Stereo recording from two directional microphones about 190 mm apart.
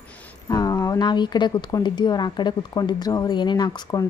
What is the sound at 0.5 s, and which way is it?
Speech, 20° left (ahead or behind).